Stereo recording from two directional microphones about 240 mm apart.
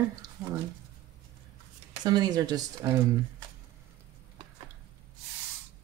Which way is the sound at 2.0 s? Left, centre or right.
Centre.